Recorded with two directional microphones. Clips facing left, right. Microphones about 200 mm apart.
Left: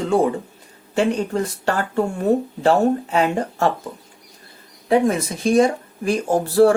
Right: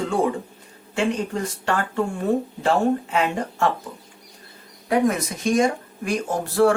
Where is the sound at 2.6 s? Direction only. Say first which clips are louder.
Left 4 dB; 40° left (ahead or behind).